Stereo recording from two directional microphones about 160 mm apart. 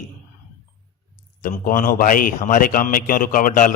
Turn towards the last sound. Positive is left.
turn(degrees=60)  # may be behind; listen again after turning